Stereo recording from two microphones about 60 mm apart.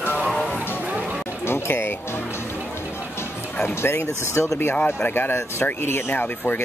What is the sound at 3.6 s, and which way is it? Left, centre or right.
Speech, left.